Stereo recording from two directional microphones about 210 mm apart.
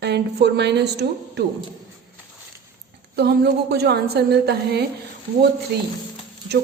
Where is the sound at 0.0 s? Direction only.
55° right (ahead or behind).